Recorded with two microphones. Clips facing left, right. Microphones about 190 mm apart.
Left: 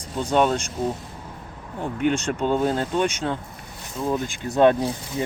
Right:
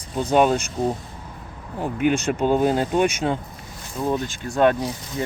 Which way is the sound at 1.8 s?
5° right (ahead or behind).